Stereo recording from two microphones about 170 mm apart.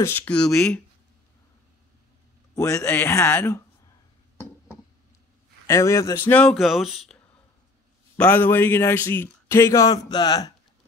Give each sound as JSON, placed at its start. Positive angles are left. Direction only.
{"t": 0.0, "sound": "a man's voice", "side_deg": 10}
{"t": 2.5, "sound": "a man's voice", "side_deg": 15}
{"t": 5.7, "sound": "a man's voice", "side_deg": 15}
{"t": 8.2, "sound": "a man's voice", "side_deg": 10}